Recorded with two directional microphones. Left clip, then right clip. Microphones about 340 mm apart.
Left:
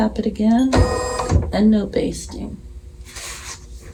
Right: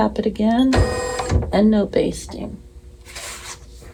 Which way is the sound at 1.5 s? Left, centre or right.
Centre.